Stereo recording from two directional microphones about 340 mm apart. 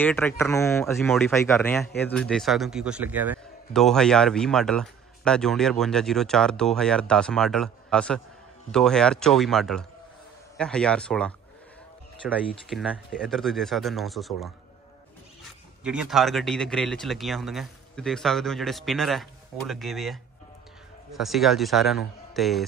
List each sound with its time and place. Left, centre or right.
0.0 s a man's voice: centre
15.8 s a man's voice: centre